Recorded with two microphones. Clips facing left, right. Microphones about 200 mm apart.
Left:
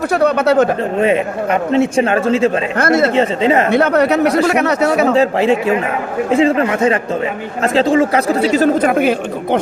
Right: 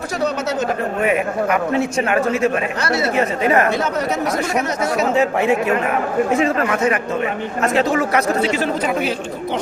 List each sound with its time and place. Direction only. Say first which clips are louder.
0.1 s speech: left 8 dB; 60° left (ahead or behind)
0.9 s a man's voice: left 4 dB; 30° left (ahead or behind)
2.7 s speech: left 7 dB; 50° left (ahead or behind)
3.2 s a man's voice: left 3 dB; 25° left (ahead or behind)
3.7 s speech: left 8 dB; 60° left (ahead or behind)
5.1 s a man's voice: left 4 dB; 30° left (ahead or behind); by 9.6 s 55° left (ahead or behind)